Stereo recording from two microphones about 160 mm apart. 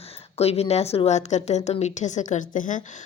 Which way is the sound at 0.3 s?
40° left (ahead or behind).